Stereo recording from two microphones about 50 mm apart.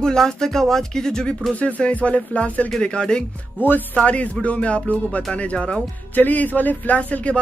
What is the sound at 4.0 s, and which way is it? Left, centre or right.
Speech, left.